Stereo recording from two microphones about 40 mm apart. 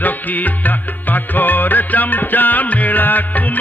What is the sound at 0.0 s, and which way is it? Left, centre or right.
Music, left.